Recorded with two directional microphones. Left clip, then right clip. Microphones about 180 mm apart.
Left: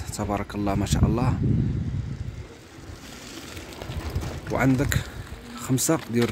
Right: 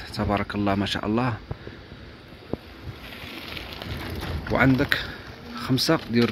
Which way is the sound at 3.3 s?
55° left (ahead or behind).